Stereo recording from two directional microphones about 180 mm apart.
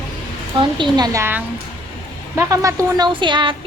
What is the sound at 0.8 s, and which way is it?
A woman's voice, 20° right (ahead or behind).